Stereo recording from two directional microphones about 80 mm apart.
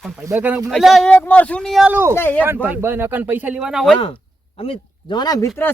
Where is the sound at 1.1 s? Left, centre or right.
Left.